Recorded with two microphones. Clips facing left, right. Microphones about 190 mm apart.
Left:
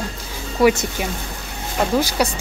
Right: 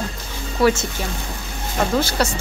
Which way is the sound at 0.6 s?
15° left (ahead or behind).